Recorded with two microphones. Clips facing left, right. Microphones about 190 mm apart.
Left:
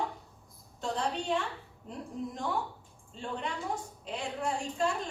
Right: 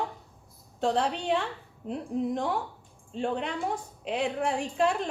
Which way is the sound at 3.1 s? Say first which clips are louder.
Right 7 dB; 70° right (ahead or behind).